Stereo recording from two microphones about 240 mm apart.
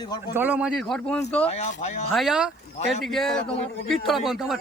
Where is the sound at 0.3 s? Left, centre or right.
Centre.